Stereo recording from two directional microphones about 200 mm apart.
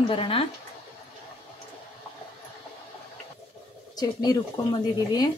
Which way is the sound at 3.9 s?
20° left (ahead or behind).